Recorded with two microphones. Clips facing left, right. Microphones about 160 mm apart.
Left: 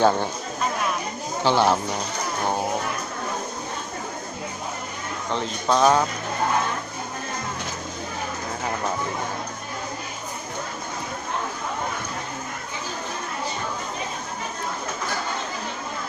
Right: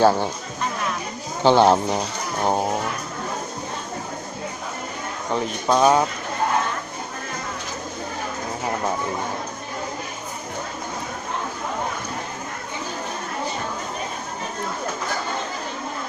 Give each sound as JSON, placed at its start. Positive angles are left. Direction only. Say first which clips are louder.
{"t": 0.0, "sound": "speech", "louder": "right 2 dB", "side_deg": -5}
{"t": 1.5, "sound": "speech", "louder": "right 5 dB", "side_deg": -30}
{"t": 5.3, "sound": "speech", "louder": "right 2 dB", "side_deg": -10}